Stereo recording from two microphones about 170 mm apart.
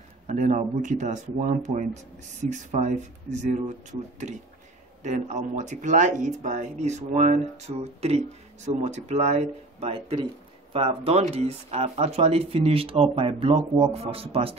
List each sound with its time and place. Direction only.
0.3 s speech: 45° right (ahead or behind)
5.0 s speech: 45° right (ahead or behind)